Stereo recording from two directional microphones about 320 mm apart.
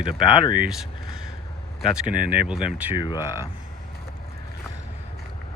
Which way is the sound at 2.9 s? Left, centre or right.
Centre.